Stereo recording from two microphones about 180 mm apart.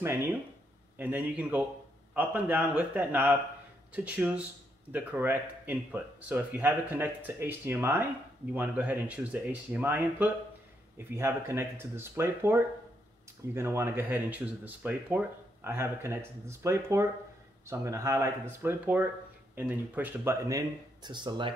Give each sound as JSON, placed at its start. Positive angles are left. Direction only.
{"t": 0.0, "sound": "speech", "side_deg": -15}